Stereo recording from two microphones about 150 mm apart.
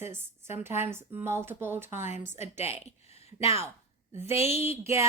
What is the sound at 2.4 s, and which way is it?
A woman's voice, 50° left (ahead or behind).